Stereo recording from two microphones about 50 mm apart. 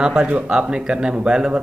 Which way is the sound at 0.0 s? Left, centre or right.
Centre.